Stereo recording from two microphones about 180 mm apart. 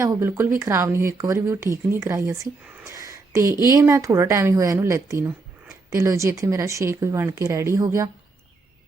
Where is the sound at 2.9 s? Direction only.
15° right (ahead or behind).